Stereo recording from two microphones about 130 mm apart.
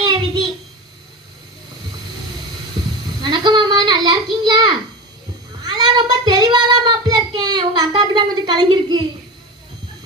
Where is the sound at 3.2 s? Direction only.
35° right (ahead or behind).